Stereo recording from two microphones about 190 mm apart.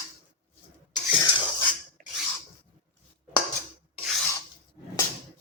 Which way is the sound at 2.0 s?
45° right (ahead or behind).